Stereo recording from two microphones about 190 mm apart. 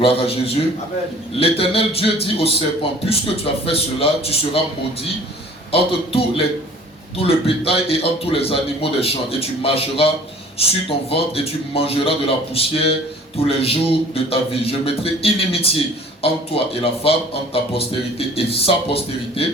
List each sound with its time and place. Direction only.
0.0 s a man's voice: 30° left (ahead or behind)
5.7 s a man's voice: 30° left (ahead or behind)